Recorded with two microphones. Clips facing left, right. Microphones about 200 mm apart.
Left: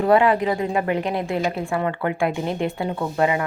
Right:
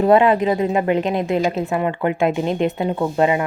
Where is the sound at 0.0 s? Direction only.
20° right (ahead or behind).